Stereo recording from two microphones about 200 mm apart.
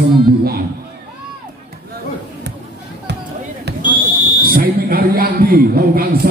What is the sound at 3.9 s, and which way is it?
Fire alarm, 25° left (ahead or behind).